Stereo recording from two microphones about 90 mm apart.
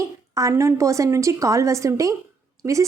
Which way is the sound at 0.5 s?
35° right (ahead or behind).